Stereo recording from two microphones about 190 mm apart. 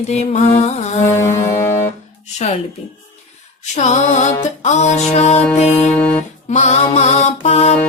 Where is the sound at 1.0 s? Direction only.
15° left (ahead or behind).